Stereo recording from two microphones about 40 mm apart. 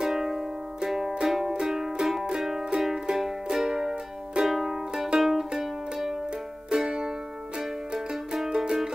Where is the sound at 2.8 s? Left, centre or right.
Centre.